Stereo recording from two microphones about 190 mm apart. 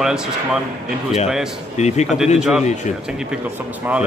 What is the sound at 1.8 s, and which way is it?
Speech, 35° left (ahead or behind).